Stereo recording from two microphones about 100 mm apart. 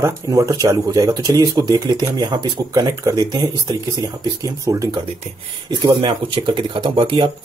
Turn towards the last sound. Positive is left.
turn(degrees=-55)  # may be behind; listen again after turning